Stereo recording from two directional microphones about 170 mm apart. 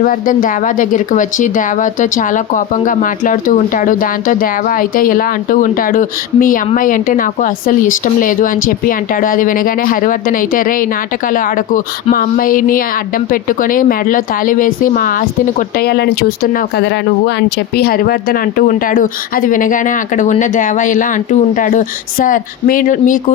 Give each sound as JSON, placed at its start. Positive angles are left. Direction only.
{"t": 0.0, "sound": "speech", "side_deg": 55}
{"t": 15.8, "sound": "speech", "side_deg": 65}
{"t": 17.7, "sound": "speech", "side_deg": 65}